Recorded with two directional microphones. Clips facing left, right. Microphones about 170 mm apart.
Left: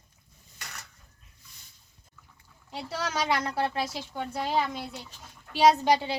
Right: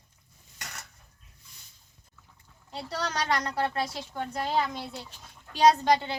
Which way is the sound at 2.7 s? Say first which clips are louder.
Left 1 dB; 5° left (ahead or behind).